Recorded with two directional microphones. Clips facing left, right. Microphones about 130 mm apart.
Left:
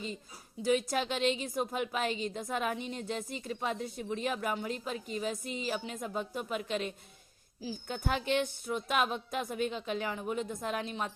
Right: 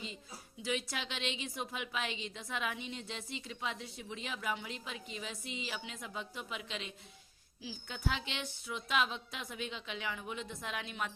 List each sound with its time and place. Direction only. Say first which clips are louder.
0.6 s a woman's voice: left 9 dB; 45° left (ahead or behind)